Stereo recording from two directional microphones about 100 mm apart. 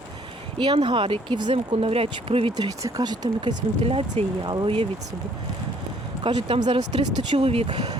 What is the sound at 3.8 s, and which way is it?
Speech, 70° right (ahead or behind).